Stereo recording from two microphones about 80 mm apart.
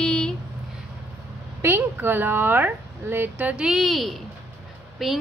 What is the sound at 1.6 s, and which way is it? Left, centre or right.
Speech, right.